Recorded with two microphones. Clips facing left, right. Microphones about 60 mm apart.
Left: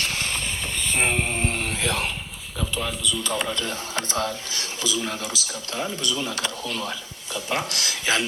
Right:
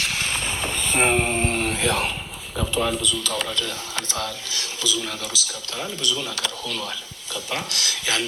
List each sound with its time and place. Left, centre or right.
0.0 s vehicle: centre
1.5 s a sound: centre
2.6 s speech: centre
3.2 s speech: centre
3.6 s speech: left